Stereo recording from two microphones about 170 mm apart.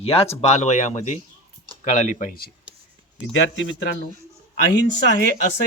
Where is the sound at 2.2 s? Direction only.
55° left (ahead or behind).